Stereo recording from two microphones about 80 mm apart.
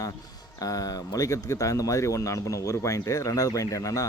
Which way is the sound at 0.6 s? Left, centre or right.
Left.